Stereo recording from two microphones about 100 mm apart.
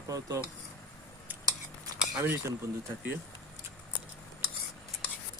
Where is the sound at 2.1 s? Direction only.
20° right (ahead or behind).